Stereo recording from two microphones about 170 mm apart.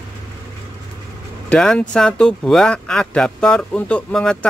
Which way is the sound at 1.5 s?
5° left (ahead or behind).